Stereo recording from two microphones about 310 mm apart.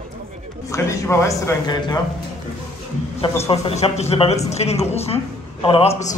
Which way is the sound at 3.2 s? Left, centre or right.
Centre.